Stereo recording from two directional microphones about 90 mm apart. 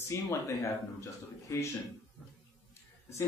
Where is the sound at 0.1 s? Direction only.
30° left (ahead or behind).